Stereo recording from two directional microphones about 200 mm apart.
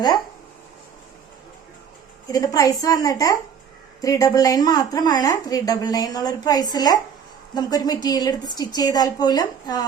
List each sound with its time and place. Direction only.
2.2 s a woman's voice: 20° left (ahead or behind)